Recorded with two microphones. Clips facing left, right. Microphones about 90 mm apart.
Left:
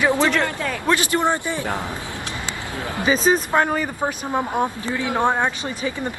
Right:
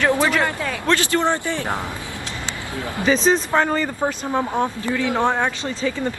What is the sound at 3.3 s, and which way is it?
Speech, 10° left (ahead or behind).